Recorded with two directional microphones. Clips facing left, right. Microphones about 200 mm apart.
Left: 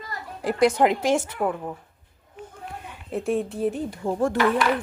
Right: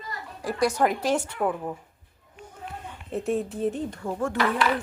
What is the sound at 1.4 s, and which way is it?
Speech, centre (ahead or behind).